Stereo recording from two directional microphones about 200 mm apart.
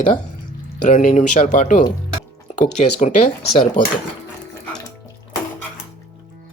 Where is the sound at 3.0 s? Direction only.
40° left (ahead or behind).